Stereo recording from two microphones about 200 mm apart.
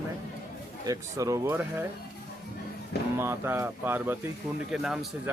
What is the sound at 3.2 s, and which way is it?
Speech, 10° right (ahead or behind).